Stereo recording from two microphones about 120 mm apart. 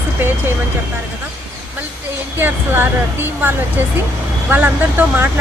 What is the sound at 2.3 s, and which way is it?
Speech, 15° right (ahead or behind).